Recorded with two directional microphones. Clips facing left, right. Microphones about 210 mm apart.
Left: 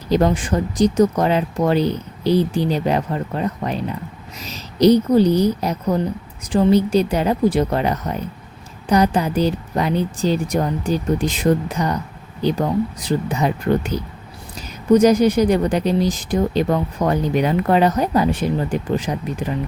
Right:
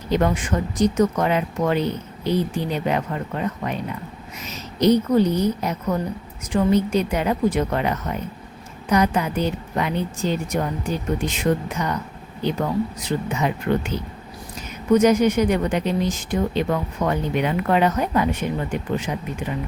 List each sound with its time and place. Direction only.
0.3 s speech: 30° left (ahead or behind)